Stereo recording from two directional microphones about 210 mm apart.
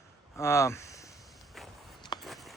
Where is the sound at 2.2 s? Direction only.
Centre (ahead or behind).